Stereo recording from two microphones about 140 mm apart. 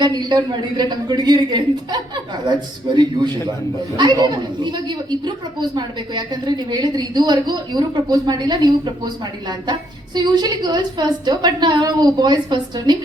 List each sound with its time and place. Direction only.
0.0 s a woman's voice: 30° right (ahead or behind)